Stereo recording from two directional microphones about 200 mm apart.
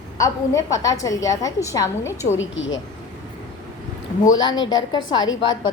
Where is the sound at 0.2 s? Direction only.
15° left (ahead or behind).